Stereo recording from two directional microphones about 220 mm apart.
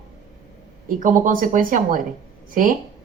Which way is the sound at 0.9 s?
35° right (ahead or behind).